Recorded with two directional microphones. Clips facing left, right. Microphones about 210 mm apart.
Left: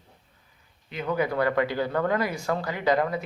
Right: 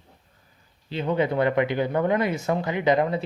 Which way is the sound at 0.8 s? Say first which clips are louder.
Right 3 dB; 30° right (ahead or behind).